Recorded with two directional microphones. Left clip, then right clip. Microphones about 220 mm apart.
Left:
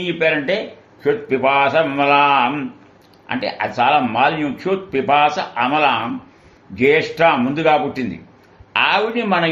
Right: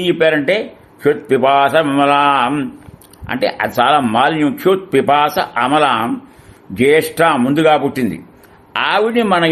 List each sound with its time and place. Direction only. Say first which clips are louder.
0.0 s a man's voice: right 5 dB; 45° right (ahead or behind)